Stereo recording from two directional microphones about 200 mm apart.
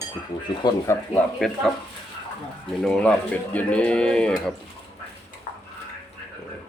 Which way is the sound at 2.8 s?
5° left (ahead or behind).